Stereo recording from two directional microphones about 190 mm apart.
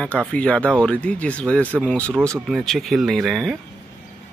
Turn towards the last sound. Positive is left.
turn(degrees=0)  # may be behind; listen again after turning